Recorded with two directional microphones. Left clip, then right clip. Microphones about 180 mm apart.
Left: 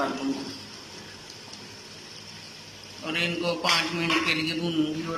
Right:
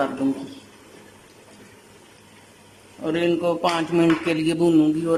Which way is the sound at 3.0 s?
45° right (ahead or behind).